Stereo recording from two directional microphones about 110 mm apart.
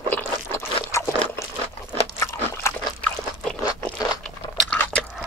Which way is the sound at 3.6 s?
35° left (ahead or behind).